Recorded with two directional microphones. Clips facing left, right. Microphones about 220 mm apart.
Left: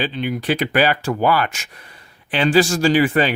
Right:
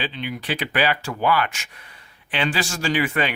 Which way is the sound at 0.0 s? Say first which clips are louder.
Left 7 dB; 45° left (ahead or behind).